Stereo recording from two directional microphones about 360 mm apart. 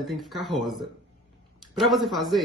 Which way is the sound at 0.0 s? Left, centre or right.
Centre.